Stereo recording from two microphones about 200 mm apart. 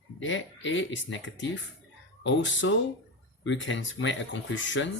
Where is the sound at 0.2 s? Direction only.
70° left (ahead or behind).